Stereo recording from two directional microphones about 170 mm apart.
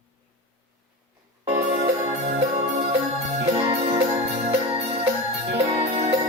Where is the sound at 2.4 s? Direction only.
40° right (ahead or behind).